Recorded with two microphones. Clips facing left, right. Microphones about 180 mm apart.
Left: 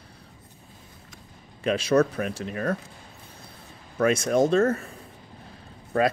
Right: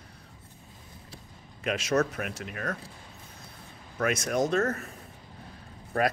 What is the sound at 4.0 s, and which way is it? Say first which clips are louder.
Speech: left 6 dB; 30° left (ahead or behind).